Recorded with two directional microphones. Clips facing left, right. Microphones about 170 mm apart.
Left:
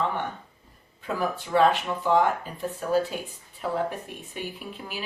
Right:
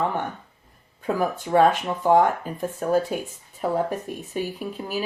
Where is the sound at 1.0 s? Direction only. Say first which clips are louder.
Right 4 dB; 45° right (ahead or behind).